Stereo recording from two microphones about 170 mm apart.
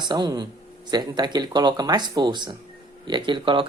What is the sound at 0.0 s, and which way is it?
Speech, 25° right (ahead or behind).